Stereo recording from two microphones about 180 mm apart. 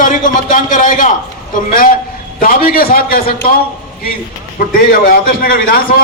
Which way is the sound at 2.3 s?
55° left (ahead or behind).